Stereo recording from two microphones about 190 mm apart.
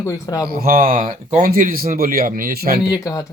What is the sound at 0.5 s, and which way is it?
Speech, 50° right (ahead or behind).